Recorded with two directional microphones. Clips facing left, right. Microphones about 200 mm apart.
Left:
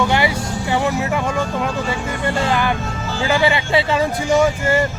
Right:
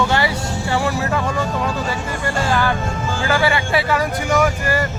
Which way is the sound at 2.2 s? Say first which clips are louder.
Left 1 dB; 20° left (ahead or behind).